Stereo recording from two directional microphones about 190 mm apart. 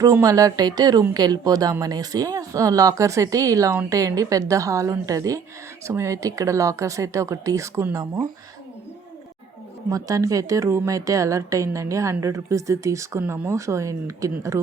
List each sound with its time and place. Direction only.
0.0 s speech: 15° right (ahead or behind)
9.9 s speech: 15° right (ahead or behind)